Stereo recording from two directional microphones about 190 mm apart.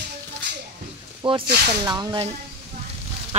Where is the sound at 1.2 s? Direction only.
25° right (ahead or behind).